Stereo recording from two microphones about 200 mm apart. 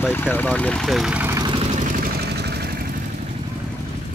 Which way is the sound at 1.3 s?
25° right (ahead or behind).